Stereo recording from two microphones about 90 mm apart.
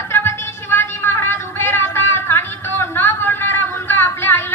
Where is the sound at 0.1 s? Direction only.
30° left (ahead or behind).